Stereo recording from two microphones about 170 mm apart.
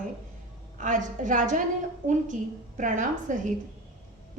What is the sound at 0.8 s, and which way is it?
A woman's voice, 50° right (ahead or behind).